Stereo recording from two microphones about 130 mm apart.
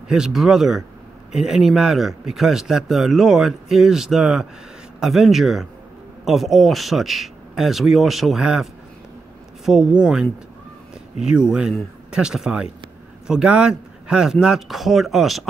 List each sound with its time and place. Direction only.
0.1 s speech: 5° right (ahead or behind)
9.7 s speech: 5° right (ahead or behind)